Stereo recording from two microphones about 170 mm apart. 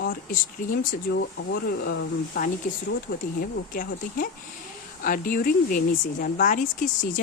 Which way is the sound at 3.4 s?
55° left (ahead or behind).